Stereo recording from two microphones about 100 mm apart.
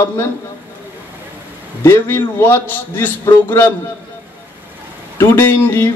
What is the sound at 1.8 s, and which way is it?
A man's voice, 25° left (ahead or behind).